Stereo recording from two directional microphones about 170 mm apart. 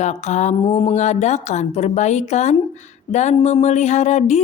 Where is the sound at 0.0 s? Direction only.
40° left (ahead or behind).